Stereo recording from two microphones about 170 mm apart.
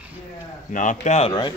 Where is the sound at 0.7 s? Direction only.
50° left (ahead or behind); by 1.5 s 30° left (ahead or behind).